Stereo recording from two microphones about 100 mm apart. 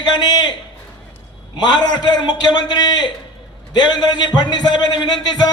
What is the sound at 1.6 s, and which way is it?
A man's voice, 45° left (ahead or behind).